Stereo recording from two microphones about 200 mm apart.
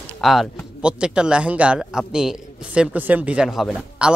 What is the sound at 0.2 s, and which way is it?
Speech, centre (ahead or behind).